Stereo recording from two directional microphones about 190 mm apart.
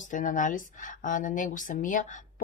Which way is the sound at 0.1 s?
45° left (ahead or behind).